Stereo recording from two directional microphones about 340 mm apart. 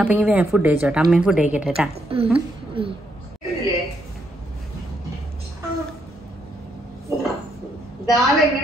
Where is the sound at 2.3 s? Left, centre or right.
Centre.